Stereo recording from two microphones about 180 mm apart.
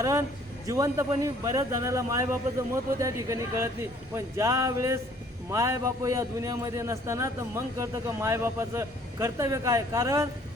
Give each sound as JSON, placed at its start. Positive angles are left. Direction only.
{"t": 0.0, "sound": "a man's voice", "side_deg": -15}